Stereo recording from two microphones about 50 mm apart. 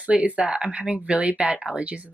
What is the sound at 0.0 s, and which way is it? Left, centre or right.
Speech, right.